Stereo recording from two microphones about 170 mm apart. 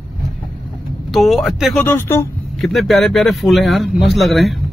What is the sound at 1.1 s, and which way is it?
Speech, centre (ahead or behind).